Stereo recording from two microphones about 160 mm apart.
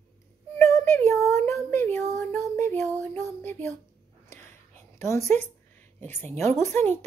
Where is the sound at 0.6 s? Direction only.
15° left (ahead or behind).